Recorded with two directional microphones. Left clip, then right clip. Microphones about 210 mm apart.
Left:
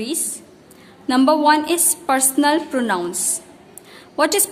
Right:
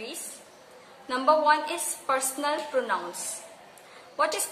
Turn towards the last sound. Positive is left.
turn(degrees=50)  # may be behind; listen again after turning